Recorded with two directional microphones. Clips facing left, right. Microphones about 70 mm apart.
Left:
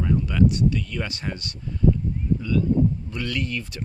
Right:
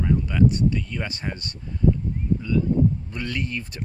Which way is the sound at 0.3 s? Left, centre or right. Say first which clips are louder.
Left 1 dB; right.